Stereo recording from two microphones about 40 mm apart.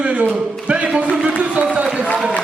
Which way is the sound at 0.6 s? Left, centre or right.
Right.